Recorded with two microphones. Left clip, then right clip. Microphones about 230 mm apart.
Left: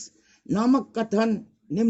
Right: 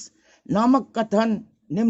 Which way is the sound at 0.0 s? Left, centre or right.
Right.